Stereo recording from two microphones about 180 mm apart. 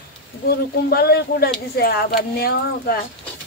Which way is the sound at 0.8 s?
60° left (ahead or behind).